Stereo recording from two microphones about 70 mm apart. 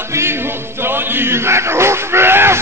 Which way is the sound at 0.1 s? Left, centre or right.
Right.